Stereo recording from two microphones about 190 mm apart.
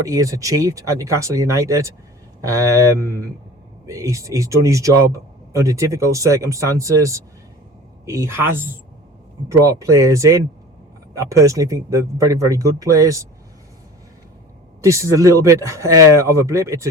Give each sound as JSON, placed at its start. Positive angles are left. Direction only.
{"t": 0.0, "sound": "speech", "side_deg": -15}
{"t": 14.8, "sound": "speech", "side_deg": -15}